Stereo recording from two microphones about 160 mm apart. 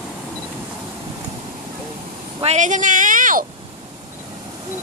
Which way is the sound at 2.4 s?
45° right (ahead or behind).